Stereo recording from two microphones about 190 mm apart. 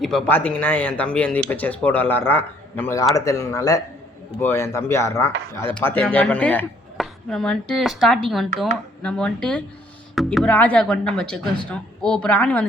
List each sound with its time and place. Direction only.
0.0 s speech: centre (ahead or behind)